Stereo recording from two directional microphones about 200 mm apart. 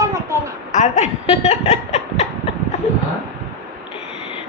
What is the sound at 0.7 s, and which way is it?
A woman's voice, 35° left (ahead or behind).